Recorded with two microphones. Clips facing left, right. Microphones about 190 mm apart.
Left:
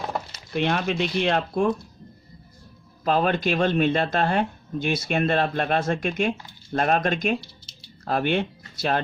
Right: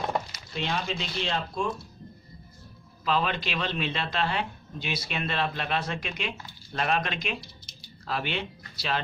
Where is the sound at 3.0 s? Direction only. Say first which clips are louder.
Left 6 dB; 50° left (ahead or behind).